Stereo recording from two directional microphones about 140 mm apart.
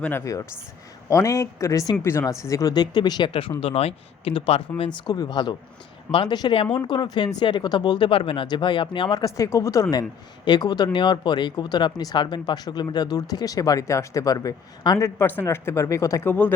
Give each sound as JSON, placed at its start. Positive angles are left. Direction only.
{"t": 1.1, "sound": "speech", "side_deg": 20}
{"t": 4.8, "sound": "speech", "side_deg": 30}
{"t": 16.3, "sound": "speech", "side_deg": 10}